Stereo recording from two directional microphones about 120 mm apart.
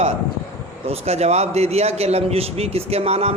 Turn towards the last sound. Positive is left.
turn(degrees=-60)  # may be behind; listen again after turning